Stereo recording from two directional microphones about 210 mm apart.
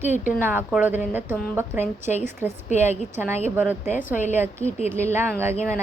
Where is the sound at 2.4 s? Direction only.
10° left (ahead or behind).